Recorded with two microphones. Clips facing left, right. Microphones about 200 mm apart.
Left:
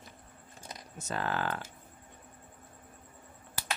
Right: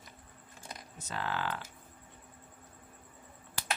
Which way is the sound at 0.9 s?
45° left (ahead or behind).